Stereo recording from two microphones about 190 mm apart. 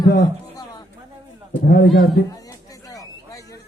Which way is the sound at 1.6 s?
55° left (ahead or behind).